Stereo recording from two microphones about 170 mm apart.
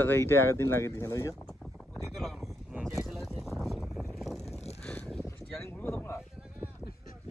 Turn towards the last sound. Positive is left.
turn(degrees=15)  # may be behind; listen again after turning